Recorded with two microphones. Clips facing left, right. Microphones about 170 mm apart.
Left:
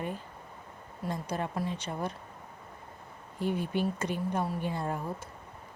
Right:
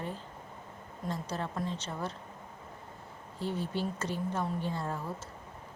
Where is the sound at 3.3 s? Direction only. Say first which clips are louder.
Left 4 dB; 15° left (ahead or behind).